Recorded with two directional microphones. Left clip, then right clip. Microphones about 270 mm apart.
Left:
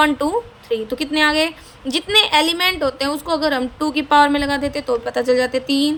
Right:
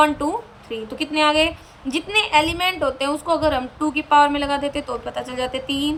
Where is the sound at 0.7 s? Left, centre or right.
Centre.